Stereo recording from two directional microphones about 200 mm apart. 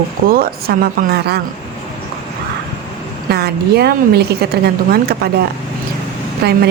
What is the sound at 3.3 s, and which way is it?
A woman's voice, 50° right (ahead or behind).